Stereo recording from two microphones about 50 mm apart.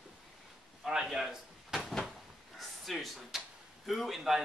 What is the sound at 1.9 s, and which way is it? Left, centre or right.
Drawer open or close, centre.